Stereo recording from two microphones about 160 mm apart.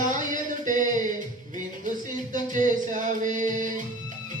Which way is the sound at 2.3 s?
55° right (ahead or behind).